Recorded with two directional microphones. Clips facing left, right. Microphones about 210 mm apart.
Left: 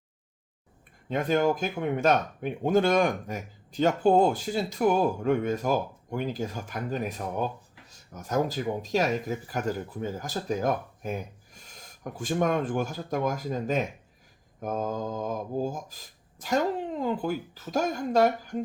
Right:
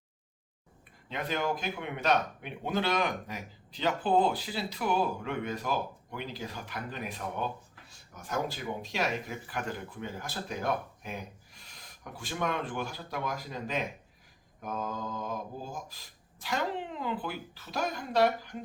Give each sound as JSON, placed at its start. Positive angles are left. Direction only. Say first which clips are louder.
{"t": 1.0, "sound": "speech", "louder": "left 8 dB", "side_deg": 45}